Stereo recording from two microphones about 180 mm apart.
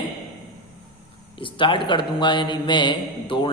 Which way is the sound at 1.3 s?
30° left (ahead or behind).